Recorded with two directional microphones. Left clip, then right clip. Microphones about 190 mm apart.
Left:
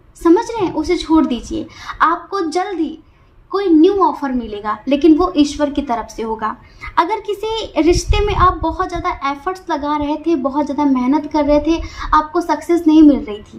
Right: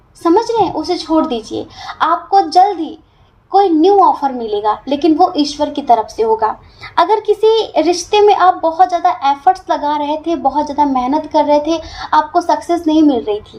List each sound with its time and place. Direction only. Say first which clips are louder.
0.2 s speech: right 2 dB; 30° left (ahead or behind)
7.4 s a woman's voice: right 3 dB; 30° left (ahead or behind)